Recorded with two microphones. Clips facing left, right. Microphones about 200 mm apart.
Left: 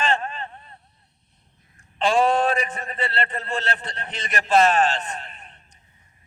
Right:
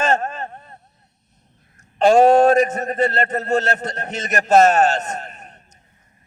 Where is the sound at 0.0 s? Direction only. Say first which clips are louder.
Right 5 dB; 45° right (ahead or behind).